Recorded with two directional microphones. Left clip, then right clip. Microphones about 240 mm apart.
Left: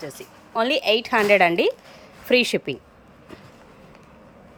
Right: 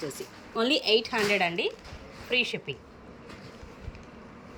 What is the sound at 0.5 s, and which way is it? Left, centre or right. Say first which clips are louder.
A woman's voice: left 4 dB; centre.